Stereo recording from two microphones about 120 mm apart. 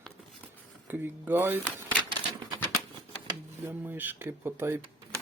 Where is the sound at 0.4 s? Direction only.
15° right (ahead or behind).